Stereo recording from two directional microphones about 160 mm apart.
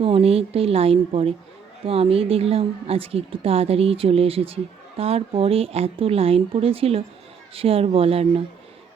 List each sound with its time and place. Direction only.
0.0 s a woman's voice: 35° right (ahead or behind)